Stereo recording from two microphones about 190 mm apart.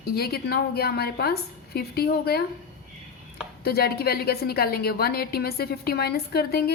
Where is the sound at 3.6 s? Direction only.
55° left (ahead or behind).